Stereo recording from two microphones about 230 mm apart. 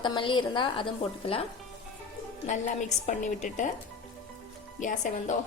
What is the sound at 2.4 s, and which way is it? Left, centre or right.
A woman's voice, left.